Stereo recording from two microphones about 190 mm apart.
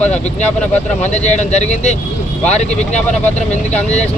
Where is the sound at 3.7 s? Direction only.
35° left (ahead or behind).